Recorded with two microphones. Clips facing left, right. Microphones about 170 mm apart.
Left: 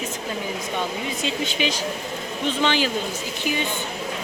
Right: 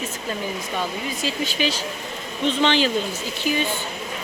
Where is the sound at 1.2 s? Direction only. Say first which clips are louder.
Right 1 dB; 20° left (ahead or behind).